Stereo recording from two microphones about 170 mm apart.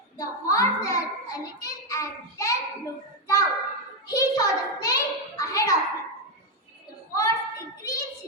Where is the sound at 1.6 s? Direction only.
20° left (ahead or behind).